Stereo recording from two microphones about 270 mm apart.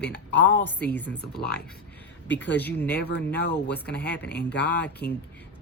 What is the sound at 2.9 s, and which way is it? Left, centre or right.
Speech, left.